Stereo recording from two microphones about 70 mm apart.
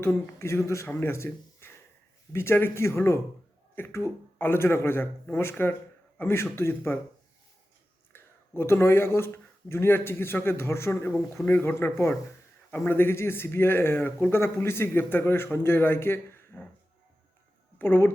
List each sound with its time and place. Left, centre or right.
0.0 s speech: left
8.1 s speech: left
17.7 s speech: left